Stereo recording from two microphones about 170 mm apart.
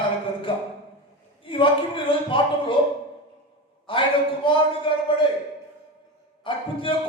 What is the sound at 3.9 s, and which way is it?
A man's voice, 30° left (ahead or behind).